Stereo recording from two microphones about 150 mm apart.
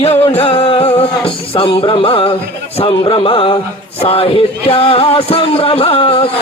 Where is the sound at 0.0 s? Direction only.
40° left (ahead or behind).